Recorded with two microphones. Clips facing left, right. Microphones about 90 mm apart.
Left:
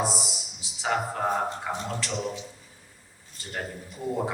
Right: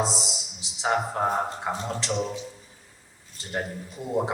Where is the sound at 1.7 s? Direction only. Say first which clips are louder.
Right 2 dB; 25° right (ahead or behind).